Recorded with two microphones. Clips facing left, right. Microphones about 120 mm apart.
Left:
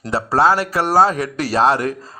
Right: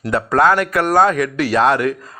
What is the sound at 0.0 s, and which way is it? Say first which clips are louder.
Speech: right 1 dB; 30° left (ahead or behind).